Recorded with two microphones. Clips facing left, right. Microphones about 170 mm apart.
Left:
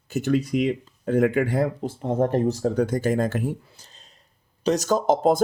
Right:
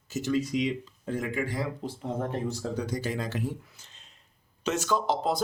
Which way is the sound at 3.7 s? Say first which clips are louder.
Left 4 dB; 35° left (ahead or behind).